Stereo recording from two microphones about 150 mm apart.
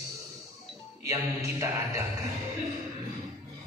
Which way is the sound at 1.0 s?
20° right (ahead or behind).